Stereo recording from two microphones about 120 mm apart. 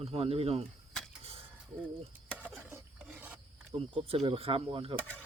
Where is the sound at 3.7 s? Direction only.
55° right (ahead or behind).